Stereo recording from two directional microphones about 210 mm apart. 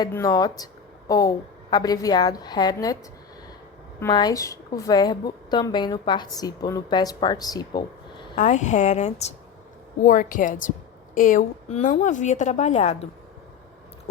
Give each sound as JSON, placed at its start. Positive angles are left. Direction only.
{"t": 0.0, "sound": "a woman's voice", "side_deg": 15}
{"t": 4.0, "sound": "a woman's voice", "side_deg": 20}
{"t": 8.4, "sound": "a woman's voice", "side_deg": 35}